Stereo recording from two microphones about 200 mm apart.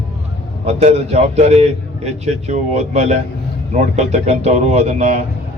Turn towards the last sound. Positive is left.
turn(degrees=-35)  # may be behind; listen again after turning